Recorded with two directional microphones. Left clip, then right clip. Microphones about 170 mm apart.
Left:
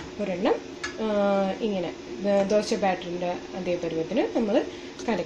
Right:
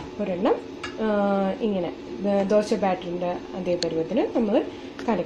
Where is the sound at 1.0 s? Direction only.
Centre (ahead or behind).